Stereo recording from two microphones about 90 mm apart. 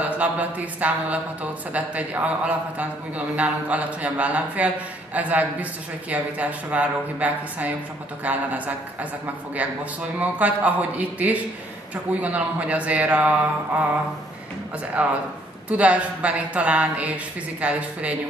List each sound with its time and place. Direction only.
0.1 s speech: 15° right (ahead or behind)
10.1 s speech: 15° right (ahead or behind)
15.0 s speech: 15° right (ahead or behind)